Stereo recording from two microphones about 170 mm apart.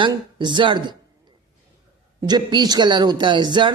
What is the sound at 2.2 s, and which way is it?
A man's voice, 25° right (ahead or behind).